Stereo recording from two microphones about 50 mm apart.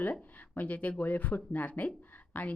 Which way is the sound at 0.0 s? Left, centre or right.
Left.